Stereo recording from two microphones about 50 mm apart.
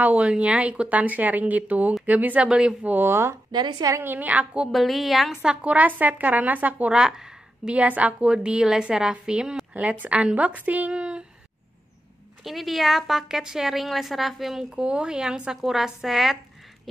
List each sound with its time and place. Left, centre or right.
0.0 s a woman's voice: right
3.1 s speech: right
4.0 s a woman's voice: right
4.6 s a woman's voice: centre
5.4 s a woman's voice: right
6.9 s a sound: centre
7.7 s a woman's voice: right
9.8 s a woman's voice: right
10.9 s speech: right
12.4 s a woman's voice: centre
14.8 s speech: centre